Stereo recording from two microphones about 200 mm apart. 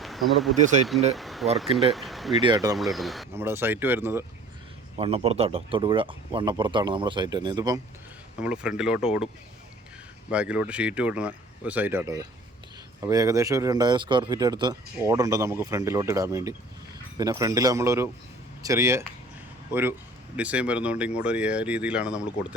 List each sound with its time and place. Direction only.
0.0 s speech: centre (ahead or behind)
2.4 s speech: 20° right (ahead or behind)
2.7 s speech: centre (ahead or behind)
3.3 s speech: 10° right (ahead or behind)
4.9 s speech: 30° right (ahead or behind)
8.4 s speech: 5° right (ahead or behind)
10.3 s speech: 5° right (ahead or behind)
20.3 s speech: 5° right (ahead or behind)